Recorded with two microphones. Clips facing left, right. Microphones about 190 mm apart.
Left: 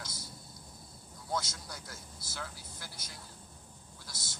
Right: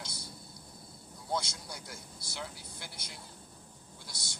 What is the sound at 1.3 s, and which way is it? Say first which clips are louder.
Speech: right 1 dB; 10° right (ahead or behind).